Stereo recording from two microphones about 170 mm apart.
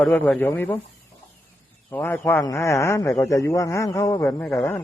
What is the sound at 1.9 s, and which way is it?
A man's voice, 10° left (ahead or behind).